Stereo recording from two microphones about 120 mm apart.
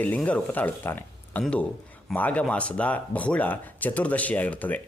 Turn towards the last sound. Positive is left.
turn(degrees=15)  # may be behind; listen again after turning